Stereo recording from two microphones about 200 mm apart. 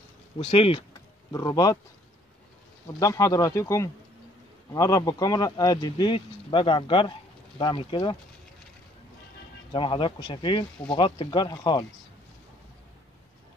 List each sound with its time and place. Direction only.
0.4 s speech: 30° left (ahead or behind)
3.0 s speech: 15° left (ahead or behind)
9.7 s speech: 25° left (ahead or behind)